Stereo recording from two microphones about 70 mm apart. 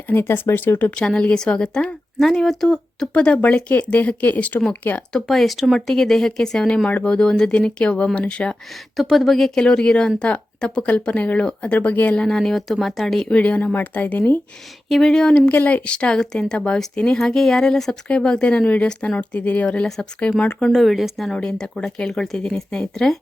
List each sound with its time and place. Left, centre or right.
0.1 s a woman's voice: left; by 3.1 s centre
3.3 s a woman's voice: centre
5.1 s speech: centre
9.0 s speech: centre
9.6 s speech: centre
13.3 s a woman's voice: centre
14.8 s speech: centre
15.4 s speech: left
20.7 s speech: centre
21.3 s speech: centre